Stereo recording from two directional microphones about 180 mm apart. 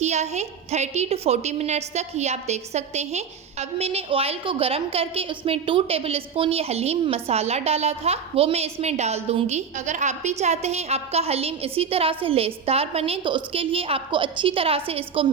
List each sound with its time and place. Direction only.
0.0 s a woman's voice: 40° right (ahead or behind)